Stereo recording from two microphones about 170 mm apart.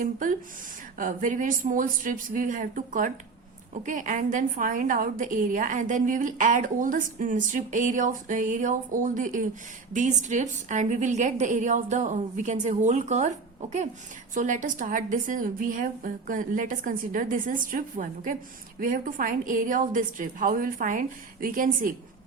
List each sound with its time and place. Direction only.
0.0 s a woman's voice: 50° right (ahead or behind)